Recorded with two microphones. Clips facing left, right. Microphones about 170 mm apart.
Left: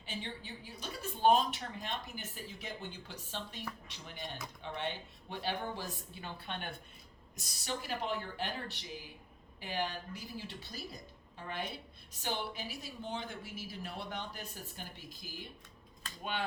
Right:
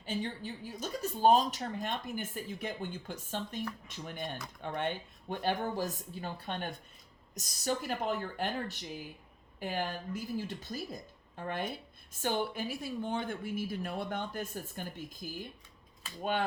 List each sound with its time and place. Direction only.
0.0 s speech: 45° right (ahead or behind)